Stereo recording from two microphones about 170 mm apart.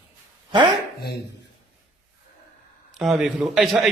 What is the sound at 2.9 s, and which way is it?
Speech, centre (ahead or behind).